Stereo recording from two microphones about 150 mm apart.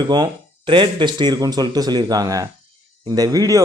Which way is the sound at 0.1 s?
30° right (ahead or behind).